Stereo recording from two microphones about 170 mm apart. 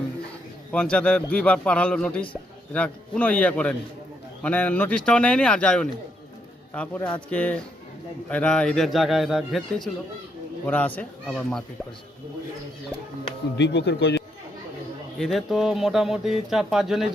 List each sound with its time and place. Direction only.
0.7 s a man's voice: 5° left (ahead or behind)
13.6 s speech: 85° left
15.2 s speech: centre (ahead or behind)